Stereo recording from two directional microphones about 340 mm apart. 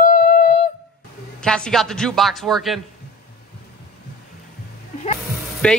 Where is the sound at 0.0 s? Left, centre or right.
Left.